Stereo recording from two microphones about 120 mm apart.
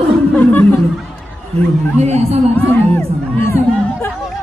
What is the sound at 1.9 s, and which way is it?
Speech, 65° right (ahead or behind).